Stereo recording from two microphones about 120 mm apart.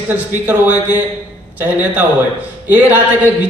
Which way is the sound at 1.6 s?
15° right (ahead or behind).